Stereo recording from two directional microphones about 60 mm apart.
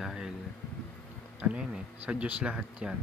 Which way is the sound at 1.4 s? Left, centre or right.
Centre.